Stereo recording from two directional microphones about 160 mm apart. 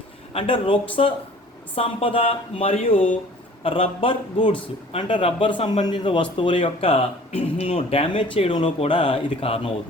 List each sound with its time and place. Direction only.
0.3 s speech: 30° left (ahead or behind)